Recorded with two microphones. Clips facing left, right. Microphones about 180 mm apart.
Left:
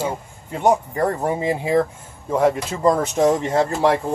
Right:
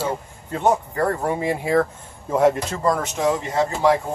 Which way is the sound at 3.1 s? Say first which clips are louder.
Left 4 dB; 45° left (ahead or behind).